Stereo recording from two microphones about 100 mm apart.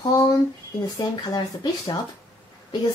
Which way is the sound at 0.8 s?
40° left (ahead or behind).